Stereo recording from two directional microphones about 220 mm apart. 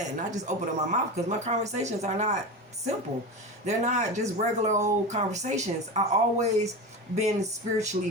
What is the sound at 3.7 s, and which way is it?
Speech, 30° right (ahead or behind).